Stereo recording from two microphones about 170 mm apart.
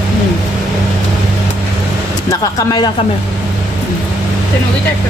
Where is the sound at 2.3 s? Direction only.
20° left (ahead or behind).